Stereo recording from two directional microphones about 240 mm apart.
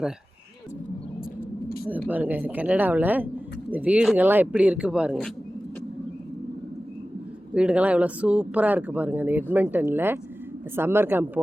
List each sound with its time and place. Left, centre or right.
1.4 s vehicle: left
2.0 s speech: centre
7.5 s speech: centre